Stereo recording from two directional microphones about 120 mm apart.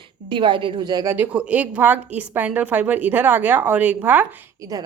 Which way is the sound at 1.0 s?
15° right (ahead or behind).